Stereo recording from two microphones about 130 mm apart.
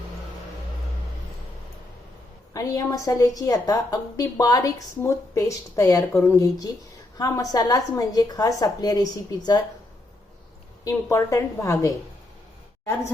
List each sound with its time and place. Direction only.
2.5 s a woman's voice: 25° left (ahead or behind)
10.8 s a woman's voice: 25° left (ahead or behind)